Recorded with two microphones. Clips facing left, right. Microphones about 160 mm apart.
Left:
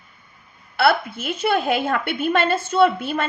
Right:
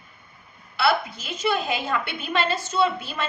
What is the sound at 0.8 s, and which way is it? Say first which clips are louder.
A woman's voice: left 4 dB; 55° left (ahead or behind).